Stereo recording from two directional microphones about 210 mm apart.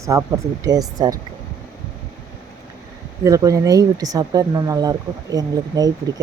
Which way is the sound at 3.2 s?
15° right (ahead or behind).